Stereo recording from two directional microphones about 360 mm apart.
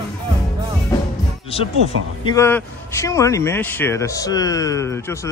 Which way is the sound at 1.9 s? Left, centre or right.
Right.